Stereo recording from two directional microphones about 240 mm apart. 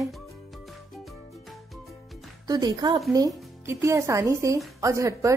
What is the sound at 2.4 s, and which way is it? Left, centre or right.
A woman's voice, centre.